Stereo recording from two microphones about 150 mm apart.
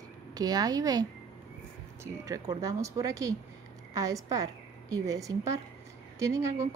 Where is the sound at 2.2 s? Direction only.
25° right (ahead or behind).